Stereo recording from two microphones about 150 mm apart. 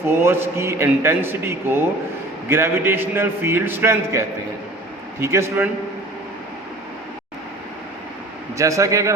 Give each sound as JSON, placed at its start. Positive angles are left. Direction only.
{"t": 0.1, "sound": "a man's voice", "side_deg": -15}
{"t": 8.5, "sound": "a man's voice", "side_deg": -20}